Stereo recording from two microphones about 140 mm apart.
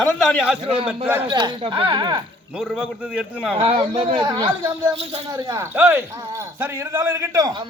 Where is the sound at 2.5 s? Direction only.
5° right (ahead or behind).